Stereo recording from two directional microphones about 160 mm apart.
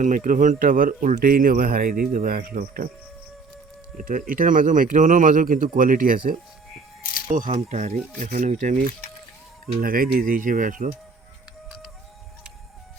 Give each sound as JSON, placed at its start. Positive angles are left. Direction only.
{"t": 0.0, "sound": "speech", "side_deg": -55}
{"t": 3.9, "sound": "speech", "side_deg": -60}
{"t": 9.8, "sound": "speech", "side_deg": -65}